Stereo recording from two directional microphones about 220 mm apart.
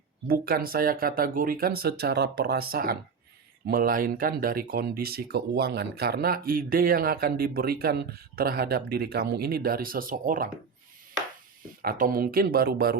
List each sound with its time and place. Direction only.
0.3 s speech: 40° right (ahead or behind)
11.8 s speech: 40° right (ahead or behind)